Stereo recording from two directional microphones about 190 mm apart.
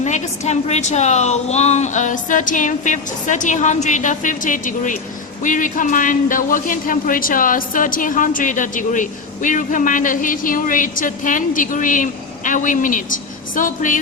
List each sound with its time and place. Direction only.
0.0 s a woman's voice: 35° left (ahead or behind)